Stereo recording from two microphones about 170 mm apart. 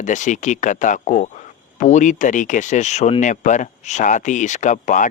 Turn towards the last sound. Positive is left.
turn(degrees=45)  # may be behind; listen again after turning